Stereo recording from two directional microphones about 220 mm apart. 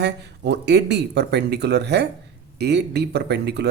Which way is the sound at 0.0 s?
50° right (ahead or behind).